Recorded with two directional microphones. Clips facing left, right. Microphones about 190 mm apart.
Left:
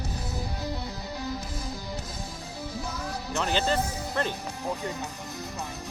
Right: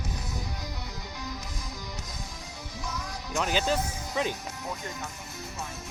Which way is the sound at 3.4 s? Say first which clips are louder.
Left 1 dB; 10° right (ahead or behind).